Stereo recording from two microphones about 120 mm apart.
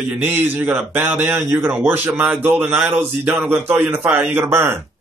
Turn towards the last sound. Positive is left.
turn(degrees=-20)  # may be behind; listen again after turning